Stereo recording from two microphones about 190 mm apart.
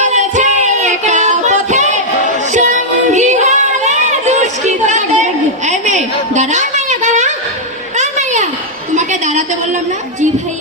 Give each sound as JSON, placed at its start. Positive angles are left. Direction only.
{"t": 0.0, "sound": "music", "side_deg": -40}
{"t": 2.5, "sound": "child singing", "side_deg": -40}
{"t": 7.9, "sound": "a sound", "side_deg": -40}